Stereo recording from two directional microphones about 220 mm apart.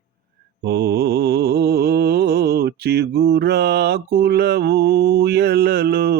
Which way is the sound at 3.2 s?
50° right (ahead or behind).